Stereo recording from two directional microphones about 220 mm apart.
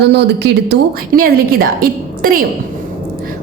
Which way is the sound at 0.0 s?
50° right (ahead or behind).